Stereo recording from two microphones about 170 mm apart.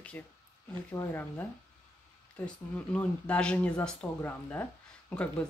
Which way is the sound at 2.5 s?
5° left (ahead or behind).